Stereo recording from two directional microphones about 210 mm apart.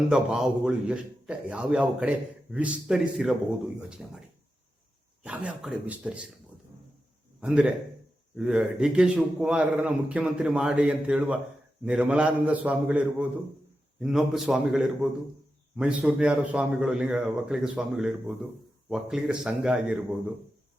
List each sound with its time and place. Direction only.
0.1 s a man's voice: 5° right (ahead or behind)
5.2 s a man's voice: 5° right (ahead or behind)
7.4 s a man's voice: 5° right (ahead or behind)